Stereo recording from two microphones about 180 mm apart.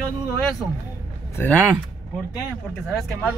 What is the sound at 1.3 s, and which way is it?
Speech, 10° left (ahead or behind).